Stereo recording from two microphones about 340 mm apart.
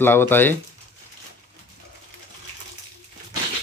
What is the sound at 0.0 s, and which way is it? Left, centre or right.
Speech, centre.